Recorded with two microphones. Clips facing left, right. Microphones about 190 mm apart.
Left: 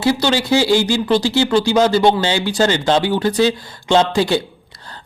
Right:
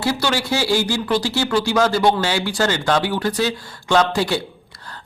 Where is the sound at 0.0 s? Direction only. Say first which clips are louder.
Left 4 dB; 20° left (ahead or behind).